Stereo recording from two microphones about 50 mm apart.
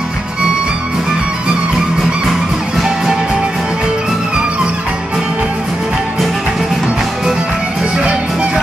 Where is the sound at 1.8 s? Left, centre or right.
Centre.